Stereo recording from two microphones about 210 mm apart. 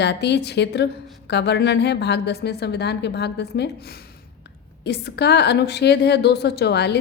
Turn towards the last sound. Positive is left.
turn(degrees=50)  # may be behind; listen again after turning